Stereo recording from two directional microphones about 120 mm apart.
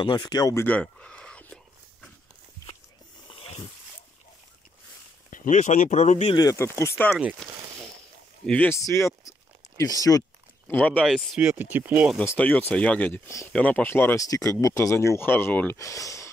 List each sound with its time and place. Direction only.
0.0 s speech: 40° left (ahead or behind)
0.6 s a sound: 10° left (ahead or behind)
3.3 s a sound: 50° left (ahead or behind)
5.3 s speech: 90° left; by 6.3 s 70° left (ahead or behind)
6.3 s speech: 30° left (ahead or behind)
7.4 s a sound: centre (ahead or behind)
8.5 s speech: 10° left (ahead or behind)
8.7 s speech: 25° left (ahead or behind)
10.7 s speech: 15° left (ahead or behind)
11.0 s speech: centre (ahead or behind)
11.3 s speech: 10° right (ahead or behind)
12.4 s speech: 15° left (ahead or behind)
14.2 s speech: 30° left (ahead or behind)
15.8 s speech: 25° left (ahead or behind)